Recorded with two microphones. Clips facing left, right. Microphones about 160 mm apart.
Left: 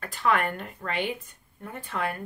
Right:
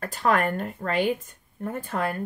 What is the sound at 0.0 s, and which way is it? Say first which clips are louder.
Speech: right 2 dB; 40° right (ahead or behind).